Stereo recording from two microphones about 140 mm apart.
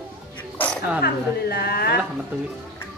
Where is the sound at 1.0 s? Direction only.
90° left.